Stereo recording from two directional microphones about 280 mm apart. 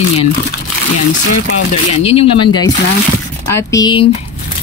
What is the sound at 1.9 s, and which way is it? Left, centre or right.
Speech, left.